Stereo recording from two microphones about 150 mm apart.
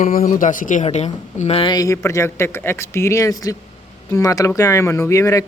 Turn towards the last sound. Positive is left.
turn(degrees=20)  # may be behind; listen again after turning